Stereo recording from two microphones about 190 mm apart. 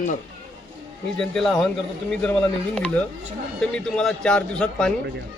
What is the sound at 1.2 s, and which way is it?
Speech, 5° left (ahead or behind).